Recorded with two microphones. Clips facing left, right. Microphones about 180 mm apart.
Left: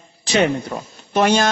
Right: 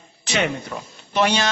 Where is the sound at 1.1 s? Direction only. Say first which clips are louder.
Left 4 dB; 45° left (ahead or behind).